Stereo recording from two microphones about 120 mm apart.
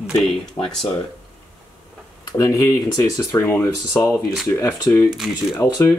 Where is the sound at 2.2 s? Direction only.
30° left (ahead or behind).